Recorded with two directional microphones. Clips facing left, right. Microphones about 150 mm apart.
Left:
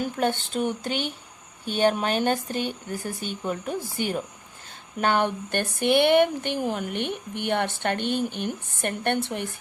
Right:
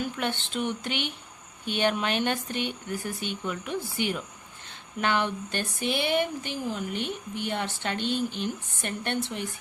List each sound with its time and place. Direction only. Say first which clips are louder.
0.0 s speech: left 5 dB; 40° left (ahead or behind)